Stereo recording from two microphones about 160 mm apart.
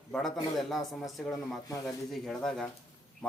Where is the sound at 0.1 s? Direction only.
Centre (ahead or behind).